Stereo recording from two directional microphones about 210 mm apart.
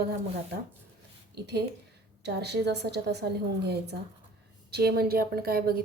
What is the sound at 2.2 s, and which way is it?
Speech, 50° right (ahead or behind).